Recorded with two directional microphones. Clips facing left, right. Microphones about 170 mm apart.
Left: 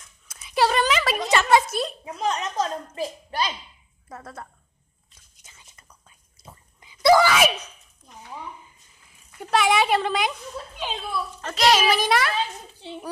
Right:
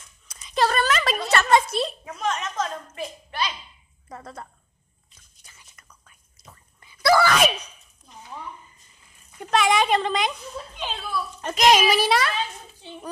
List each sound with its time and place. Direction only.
0.3 s a sound: 5° left (ahead or behind)
1.7 s a woman's voice: centre (ahead or behind)
2.1 s a woman's voice: 35° left (ahead or behind)
4.1 s a woman's voice: centre (ahead or behind)
5.4 s whispering: 25° left (ahead or behind)
7.2 s a woman's voice: 5° left (ahead or behind)
9.1 s a woman's voice: 5° left (ahead or behind)
11.0 s speech: 25° left (ahead or behind)
11.4 s speech: 15° right (ahead or behind)
12.1 s a woman's voice: centre (ahead or behind)